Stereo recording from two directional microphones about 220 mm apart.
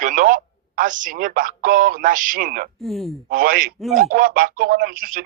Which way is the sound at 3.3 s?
40° right (ahead or behind).